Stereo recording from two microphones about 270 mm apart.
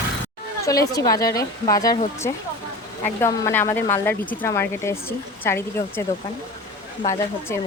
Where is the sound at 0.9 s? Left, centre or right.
Centre.